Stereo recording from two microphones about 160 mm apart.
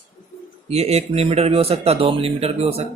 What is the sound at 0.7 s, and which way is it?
Speech, 40° right (ahead or behind).